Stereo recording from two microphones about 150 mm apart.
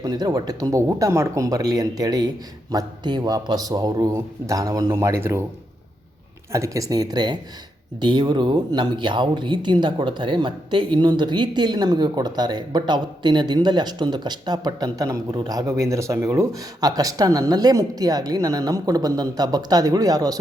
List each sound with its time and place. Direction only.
0.0 s speech: 25° right (ahead or behind)
6.5 s speech: 20° right (ahead or behind)